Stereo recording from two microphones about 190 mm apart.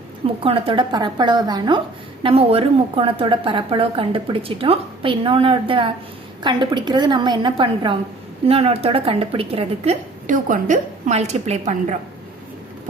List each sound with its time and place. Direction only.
0.4 s a woman's voice: 30° right (ahead or behind)